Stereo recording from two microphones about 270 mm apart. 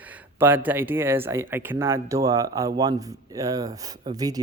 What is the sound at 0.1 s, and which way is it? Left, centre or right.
Speech, centre.